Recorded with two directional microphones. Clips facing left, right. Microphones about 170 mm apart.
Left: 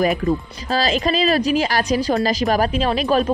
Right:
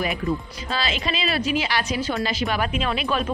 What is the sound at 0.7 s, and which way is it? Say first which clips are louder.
A woman's voice: left 8 dB; 40° left (ahead or behind).